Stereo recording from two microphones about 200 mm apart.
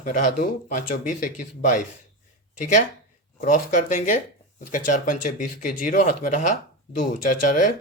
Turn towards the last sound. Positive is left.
turn(degrees=40)  # may be behind; listen again after turning